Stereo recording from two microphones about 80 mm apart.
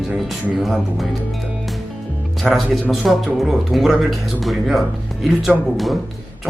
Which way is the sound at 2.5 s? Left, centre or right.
Centre.